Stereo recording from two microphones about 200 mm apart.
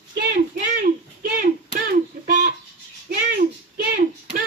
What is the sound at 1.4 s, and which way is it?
Hands, 50° right (ahead or behind).